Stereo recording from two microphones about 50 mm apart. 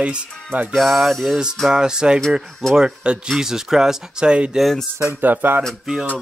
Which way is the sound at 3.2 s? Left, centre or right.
Centre.